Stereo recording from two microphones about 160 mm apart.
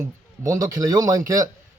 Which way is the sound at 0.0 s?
20° right (ahead or behind).